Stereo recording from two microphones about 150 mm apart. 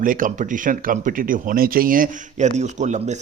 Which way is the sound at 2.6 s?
50° right (ahead or behind).